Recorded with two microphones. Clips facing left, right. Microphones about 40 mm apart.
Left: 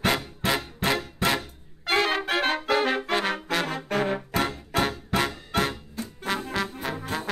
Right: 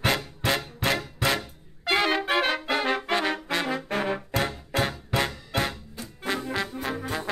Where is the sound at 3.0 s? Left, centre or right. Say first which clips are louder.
Even; centre.